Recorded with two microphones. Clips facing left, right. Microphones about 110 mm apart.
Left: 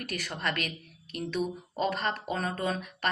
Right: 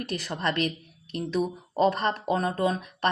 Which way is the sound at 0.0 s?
30° right (ahead or behind).